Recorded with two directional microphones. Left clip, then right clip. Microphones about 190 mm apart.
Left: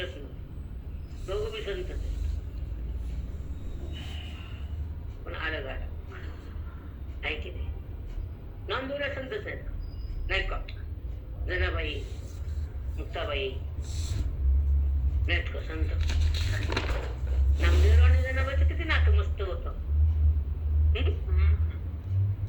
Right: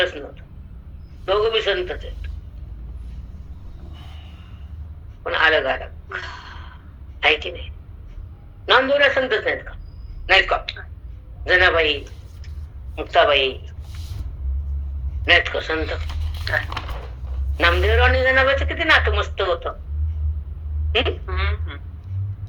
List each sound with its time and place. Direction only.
1.3 s a man's voice: 50° right (ahead or behind)
5.2 s a man's voice: 50° right (ahead or behind)
8.6 s a man's voice: 50° right (ahead or behind)
13.0 s a man's voice: 50° right (ahead or behind)
15.3 s a man's voice: 50° right (ahead or behind)
17.6 s a man's voice: 50° right (ahead or behind)
20.9 s a man's voice: 50° right (ahead or behind)